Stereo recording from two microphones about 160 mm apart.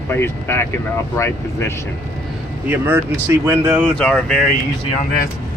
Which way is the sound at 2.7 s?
15° right (ahead or behind).